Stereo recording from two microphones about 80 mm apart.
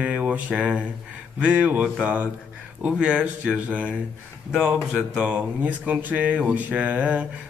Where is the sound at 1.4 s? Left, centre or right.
Centre.